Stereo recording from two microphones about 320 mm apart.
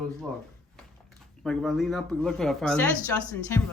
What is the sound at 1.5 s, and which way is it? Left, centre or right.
A man's voice, centre.